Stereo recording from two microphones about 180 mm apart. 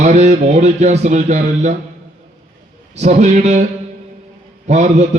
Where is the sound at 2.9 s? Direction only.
40° right (ahead or behind).